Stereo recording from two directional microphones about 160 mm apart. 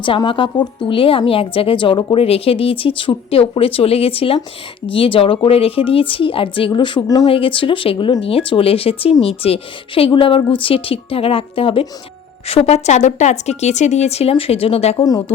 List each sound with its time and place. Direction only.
0.0 s a woman's voice: 30° left (ahead or behind)
14.9 s speech: 25° left (ahead or behind)